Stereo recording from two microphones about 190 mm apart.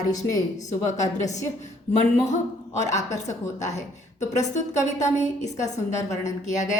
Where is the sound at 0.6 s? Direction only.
40° left (ahead or behind).